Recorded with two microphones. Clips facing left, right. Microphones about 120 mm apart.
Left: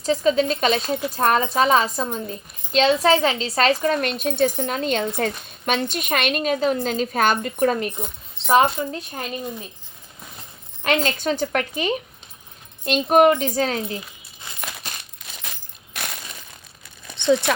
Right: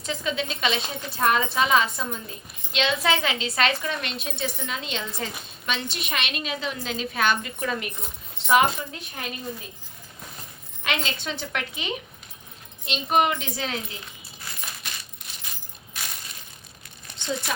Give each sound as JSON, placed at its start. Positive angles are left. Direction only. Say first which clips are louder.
{"t": 0.0, "sound": "a woman's voice", "louder": "left 10 dB", "side_deg": 35}
{"t": 10.8, "sound": "a woman's voice", "louder": "left 8 dB", "side_deg": 40}
{"t": 14.5, "sound": "coin", "louder": "left 1 dB", "side_deg": 20}
{"t": 15.2, "sound": "coin", "louder": "left 3 dB", "side_deg": 90}
{"t": 15.9, "sound": "a sound", "louder": "left 5 dB", "side_deg": 70}
{"t": 17.2, "sound": "speech", "louder": "left 12 dB", "side_deg": 75}